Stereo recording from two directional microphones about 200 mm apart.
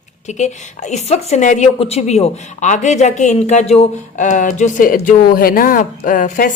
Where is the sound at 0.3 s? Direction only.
35° left (ahead or behind).